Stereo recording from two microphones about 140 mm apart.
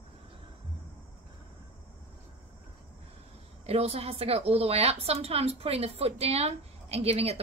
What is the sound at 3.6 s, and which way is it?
A woman's voice, 45° right (ahead or behind).